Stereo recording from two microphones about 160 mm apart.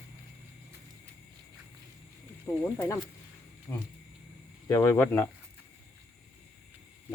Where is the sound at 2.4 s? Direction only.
15° left (ahead or behind).